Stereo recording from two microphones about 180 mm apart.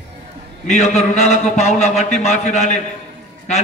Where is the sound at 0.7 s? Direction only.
40° left (ahead or behind).